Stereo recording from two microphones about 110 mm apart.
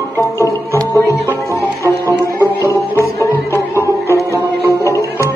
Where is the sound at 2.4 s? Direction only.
25° right (ahead or behind).